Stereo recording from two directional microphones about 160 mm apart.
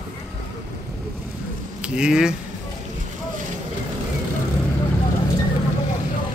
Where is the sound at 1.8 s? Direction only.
5° right (ahead or behind).